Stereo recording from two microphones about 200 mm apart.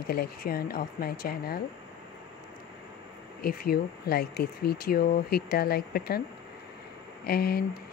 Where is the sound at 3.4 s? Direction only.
50° left (ahead or behind).